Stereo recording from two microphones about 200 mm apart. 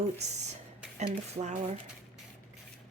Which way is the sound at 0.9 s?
35° right (ahead or behind).